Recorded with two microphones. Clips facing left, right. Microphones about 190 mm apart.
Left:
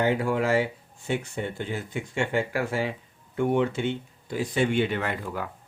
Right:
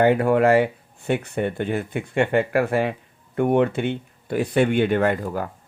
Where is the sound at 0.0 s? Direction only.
60° right (ahead or behind).